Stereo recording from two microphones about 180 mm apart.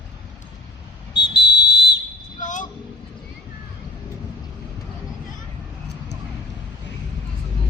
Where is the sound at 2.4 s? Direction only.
45° left (ahead or behind).